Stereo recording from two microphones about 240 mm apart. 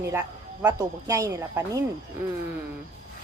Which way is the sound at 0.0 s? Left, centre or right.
Centre.